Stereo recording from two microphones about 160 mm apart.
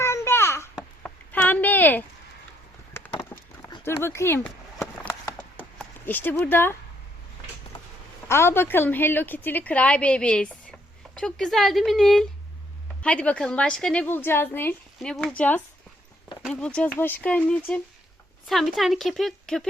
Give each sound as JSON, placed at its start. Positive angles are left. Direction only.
{"t": 0.0, "sound": "a sound", "side_deg": 15}
{"t": 5.8, "sound": "speech", "side_deg": 10}
{"t": 8.3, "sound": "a woman's voice", "side_deg": 15}